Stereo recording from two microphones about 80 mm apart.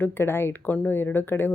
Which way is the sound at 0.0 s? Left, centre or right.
Left.